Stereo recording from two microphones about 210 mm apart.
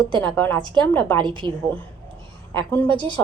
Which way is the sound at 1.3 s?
25° right (ahead or behind).